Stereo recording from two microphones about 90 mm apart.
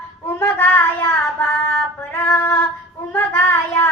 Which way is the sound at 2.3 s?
30° left (ahead or behind).